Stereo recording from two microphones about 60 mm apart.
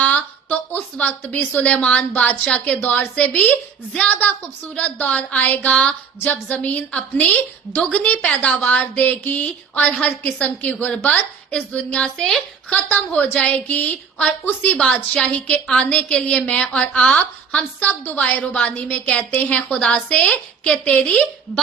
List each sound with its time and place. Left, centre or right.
0.0 s a woman's voice: left
2.8 s a woman's voice: left
3.9 s a woman's voice: centre
12.1 s a woman's voice: centre
12.7 s a woman's voice: left
14.8 s a woman's voice: left
17.7 s a woman's voice: left